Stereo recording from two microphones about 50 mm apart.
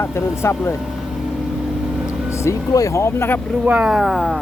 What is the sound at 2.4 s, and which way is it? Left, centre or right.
Speech, left.